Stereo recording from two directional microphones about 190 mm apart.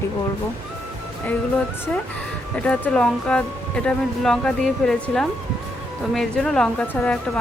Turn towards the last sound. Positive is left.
turn(degrees=10)  # may be behind; listen again after turning